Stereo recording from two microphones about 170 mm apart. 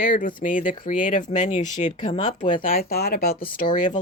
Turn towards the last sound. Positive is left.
turn(degrees=50)  # may be behind; listen again after turning